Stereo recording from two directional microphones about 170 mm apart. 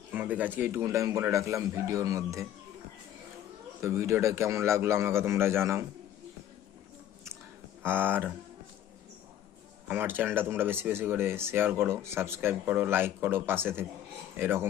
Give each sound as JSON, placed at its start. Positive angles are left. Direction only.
{"t": 0.1, "sound": "speech", "side_deg": -10}
{"t": 3.8, "sound": "speech", "side_deg": -15}
{"t": 7.8, "sound": "speech", "side_deg": -10}
{"t": 9.9, "sound": "speech", "side_deg": -10}